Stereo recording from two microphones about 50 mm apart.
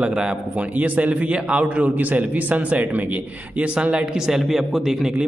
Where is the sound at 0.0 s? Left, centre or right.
Centre.